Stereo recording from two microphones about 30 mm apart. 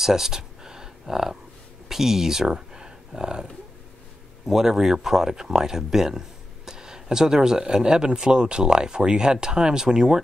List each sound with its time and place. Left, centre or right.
0.0 s a sound: centre
1.9 s speech: centre
4.5 s speech: centre